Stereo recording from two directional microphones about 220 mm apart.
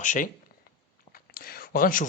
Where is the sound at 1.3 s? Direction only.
40° left (ahead or behind).